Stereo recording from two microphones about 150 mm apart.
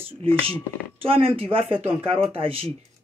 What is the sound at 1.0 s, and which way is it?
Speech, 40° right (ahead or behind).